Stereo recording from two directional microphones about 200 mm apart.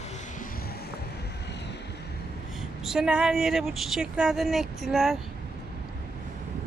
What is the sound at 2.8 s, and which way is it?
A woman's voice, 5° right (ahead or behind).